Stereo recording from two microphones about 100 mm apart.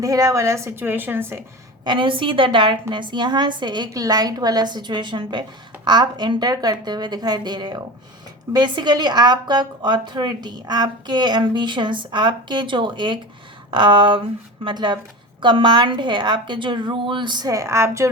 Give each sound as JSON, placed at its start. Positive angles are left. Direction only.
{"t": 0.0, "sound": "a woman's voice", "side_deg": -35}
{"t": 1.8, "sound": "a woman's voice", "side_deg": -55}
{"t": 3.9, "sound": "a woman's voice", "side_deg": -40}